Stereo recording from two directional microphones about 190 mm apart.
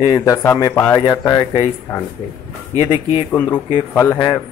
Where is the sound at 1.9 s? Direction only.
10° left (ahead or behind).